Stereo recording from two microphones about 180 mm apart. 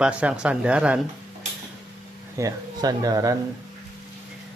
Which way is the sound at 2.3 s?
20° right (ahead or behind).